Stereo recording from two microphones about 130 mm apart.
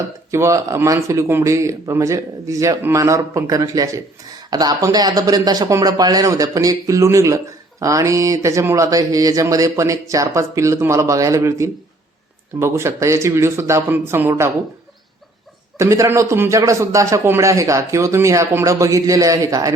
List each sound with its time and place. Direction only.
0.3 s speech: 20° right (ahead or behind)
15.8 s speech: 25° right (ahead or behind)